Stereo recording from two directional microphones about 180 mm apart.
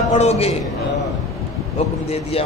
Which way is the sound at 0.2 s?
35° left (ahead or behind).